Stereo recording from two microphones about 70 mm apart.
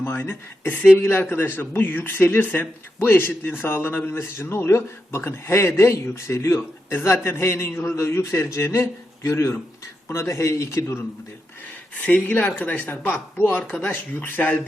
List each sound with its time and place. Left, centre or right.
0.0 s speech: left
12.0 s speech: left